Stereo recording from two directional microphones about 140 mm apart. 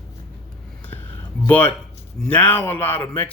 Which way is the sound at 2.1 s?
10° left (ahead or behind).